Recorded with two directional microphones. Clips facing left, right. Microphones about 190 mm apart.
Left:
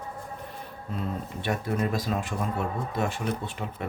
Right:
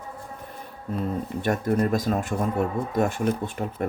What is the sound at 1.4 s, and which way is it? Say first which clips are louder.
Speech: right 5 dB; 45° right (ahead or behind).